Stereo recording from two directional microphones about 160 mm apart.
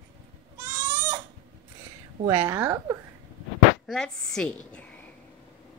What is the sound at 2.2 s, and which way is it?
Speech, 15° right (ahead or behind).